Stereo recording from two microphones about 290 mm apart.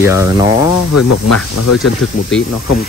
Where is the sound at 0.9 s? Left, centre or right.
Left.